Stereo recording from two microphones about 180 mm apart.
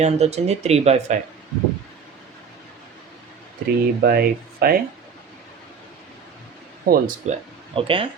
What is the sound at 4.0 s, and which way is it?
Speech, 60° right (ahead or behind).